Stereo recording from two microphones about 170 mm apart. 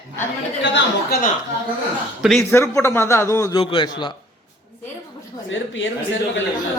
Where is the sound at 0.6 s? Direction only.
90° left.